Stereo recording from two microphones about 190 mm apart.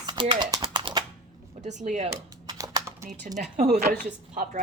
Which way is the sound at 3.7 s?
55° right (ahead or behind).